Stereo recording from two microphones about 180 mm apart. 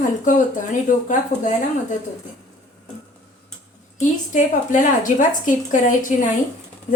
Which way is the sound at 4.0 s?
45° left (ahead or behind).